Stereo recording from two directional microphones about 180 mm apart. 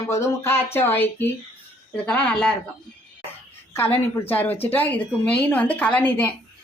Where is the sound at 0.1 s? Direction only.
15° left (ahead or behind).